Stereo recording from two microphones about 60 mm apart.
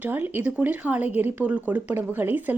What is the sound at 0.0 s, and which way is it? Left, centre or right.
A woman's voice, right.